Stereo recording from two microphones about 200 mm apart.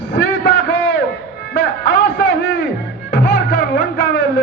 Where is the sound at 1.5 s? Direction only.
60° left (ahead or behind).